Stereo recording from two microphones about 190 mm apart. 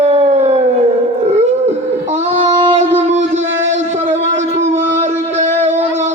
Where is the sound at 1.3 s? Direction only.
35° right (ahead or behind).